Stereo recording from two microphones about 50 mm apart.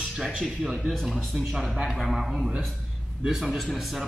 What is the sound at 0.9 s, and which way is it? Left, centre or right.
A man's voice, centre.